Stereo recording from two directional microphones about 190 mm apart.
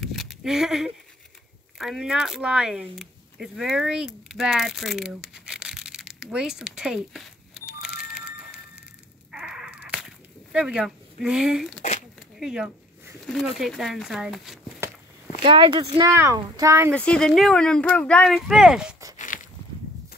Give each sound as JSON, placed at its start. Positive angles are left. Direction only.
{"t": 0.0, "sound": "a sound", "side_deg": 0}
{"t": 1.8, "sound": "speech", "side_deg": 0}
{"t": 9.3, "sound": "crow", "side_deg": -5}
{"t": 12.4, "sound": "speech", "side_deg": -5}
{"t": 13.2, "sound": "a sound", "side_deg": 0}
{"t": 13.6, "sound": "speech", "side_deg": 0}
{"t": 15.4, "sound": "speech", "side_deg": -25}
{"t": 16.9, "sound": "speech", "side_deg": 5}
{"t": 19.1, "sound": "a sound", "side_deg": 45}